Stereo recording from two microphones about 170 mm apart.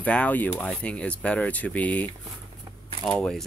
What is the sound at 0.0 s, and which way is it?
Speech, 10° left (ahead or behind).